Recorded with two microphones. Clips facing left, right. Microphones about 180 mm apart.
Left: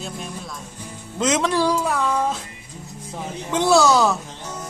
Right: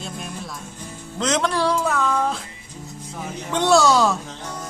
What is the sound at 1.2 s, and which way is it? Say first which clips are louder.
Speech: left 2 dB; 5° left (ahead or behind).